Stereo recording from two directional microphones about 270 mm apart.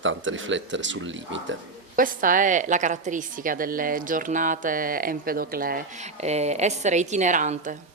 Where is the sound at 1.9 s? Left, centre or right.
Right.